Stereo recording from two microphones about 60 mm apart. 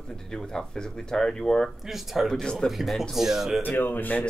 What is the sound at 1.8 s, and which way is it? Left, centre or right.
Speech, centre.